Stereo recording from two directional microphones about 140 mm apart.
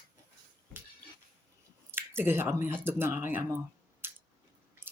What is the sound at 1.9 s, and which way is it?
Speech, 15° right (ahead or behind).